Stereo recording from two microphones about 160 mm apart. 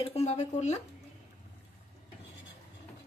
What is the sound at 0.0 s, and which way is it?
Speech, 40° left (ahead or behind).